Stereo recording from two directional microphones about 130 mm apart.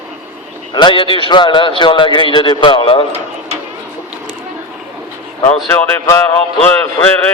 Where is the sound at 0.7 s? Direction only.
40° left (ahead or behind).